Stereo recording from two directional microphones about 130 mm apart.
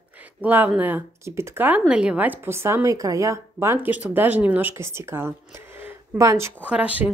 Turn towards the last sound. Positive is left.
turn(degrees=-10)  # may be behind; listen again after turning